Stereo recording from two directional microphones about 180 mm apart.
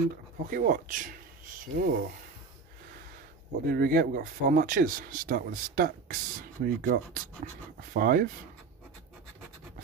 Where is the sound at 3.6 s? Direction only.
55° right (ahead or behind).